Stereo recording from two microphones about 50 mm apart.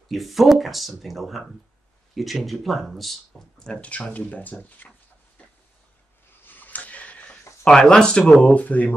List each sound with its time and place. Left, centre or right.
0.1 s speech: centre
3.5 s speech: centre
4.1 s speech: left
6.4 s a sound: left
7.6 s speech: centre
8.4 s speech: left